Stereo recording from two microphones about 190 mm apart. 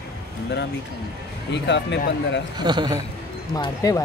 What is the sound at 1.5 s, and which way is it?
Speech, 65° left (ahead or behind).